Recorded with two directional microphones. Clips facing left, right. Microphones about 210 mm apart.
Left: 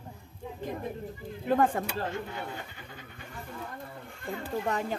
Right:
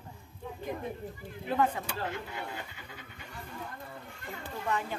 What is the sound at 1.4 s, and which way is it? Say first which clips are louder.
Speech: left 4 dB; 50° left (ahead or behind).